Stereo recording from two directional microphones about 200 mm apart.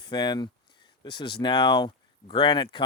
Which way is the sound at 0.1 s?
20° left (ahead or behind).